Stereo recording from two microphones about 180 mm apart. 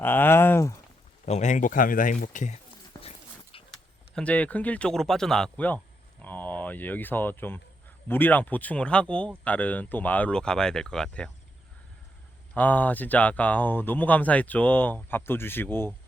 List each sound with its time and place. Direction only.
0.0 s speech: 10° left (ahead or behind)
1.2 s a man's voice: 40° left (ahead or behind)
3.0 s a sound: 35° left (ahead or behind)
3.7 s speech: 5° left (ahead or behind)
12.5 s speech: 10° left (ahead or behind)